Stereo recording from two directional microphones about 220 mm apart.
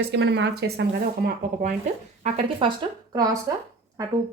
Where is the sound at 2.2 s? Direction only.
25° right (ahead or behind).